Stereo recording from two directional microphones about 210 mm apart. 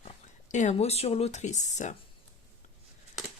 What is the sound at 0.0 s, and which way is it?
Speech, 35° left (ahead or behind).